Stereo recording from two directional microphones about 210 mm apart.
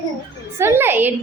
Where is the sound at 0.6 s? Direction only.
10° right (ahead or behind).